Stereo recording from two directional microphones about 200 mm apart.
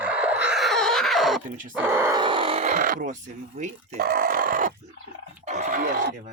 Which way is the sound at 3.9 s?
45° right (ahead or behind).